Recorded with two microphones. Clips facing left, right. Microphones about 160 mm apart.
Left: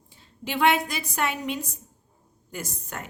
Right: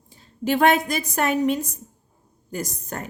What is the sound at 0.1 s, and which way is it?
A woman's voice, 45° right (ahead or behind).